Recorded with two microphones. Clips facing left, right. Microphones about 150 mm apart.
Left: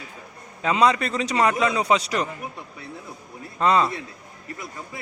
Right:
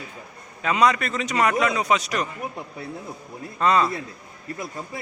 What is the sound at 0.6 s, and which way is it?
A man's voice, 25° left (ahead or behind).